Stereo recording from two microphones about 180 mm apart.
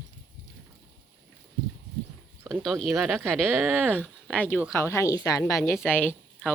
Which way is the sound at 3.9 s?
10° right (ahead or behind).